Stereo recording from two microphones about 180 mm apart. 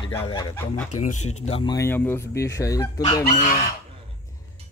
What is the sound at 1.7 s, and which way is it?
Speech, 15° left (ahead or behind).